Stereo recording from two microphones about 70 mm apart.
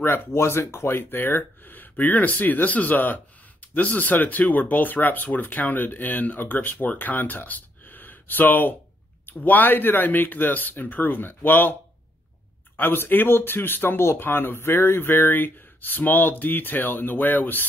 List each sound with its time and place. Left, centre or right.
0.0 s speech: left
12.7 s speech: left